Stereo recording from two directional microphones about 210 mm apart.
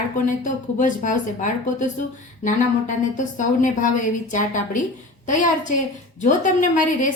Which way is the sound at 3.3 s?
35° left (ahead or behind).